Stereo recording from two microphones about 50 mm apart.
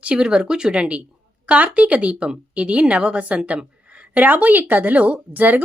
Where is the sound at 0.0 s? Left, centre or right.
Right.